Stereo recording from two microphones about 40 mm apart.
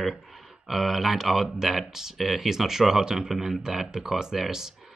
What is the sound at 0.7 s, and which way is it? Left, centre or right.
Speech, centre.